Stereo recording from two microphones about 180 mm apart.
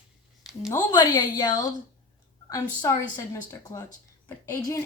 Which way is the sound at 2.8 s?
20° left (ahead or behind).